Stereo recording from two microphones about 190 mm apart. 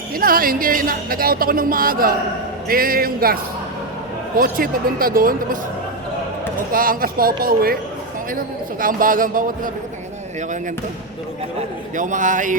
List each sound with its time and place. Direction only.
0.1 s speech: 50° right (ahead or behind)
4.4 s speech: 50° right (ahead or behind)
6.7 s speech: 50° right (ahead or behind)
8.8 s speech: 45° right (ahead or behind)
11.9 s speech: 40° right (ahead or behind)